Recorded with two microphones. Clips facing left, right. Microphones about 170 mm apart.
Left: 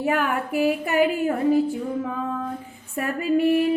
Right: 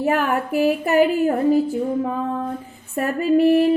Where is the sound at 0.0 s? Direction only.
40° right (ahead or behind).